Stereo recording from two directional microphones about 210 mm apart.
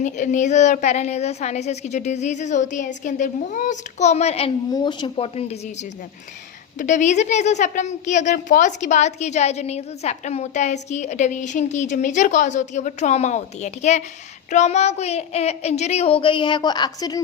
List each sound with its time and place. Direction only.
0.0 s speech: 35° left (ahead or behind)
6.7 s speech: 35° left (ahead or behind); by 17.2 s 20° left (ahead or behind)